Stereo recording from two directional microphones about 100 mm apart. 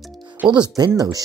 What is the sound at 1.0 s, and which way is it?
Speech, 40° right (ahead or behind).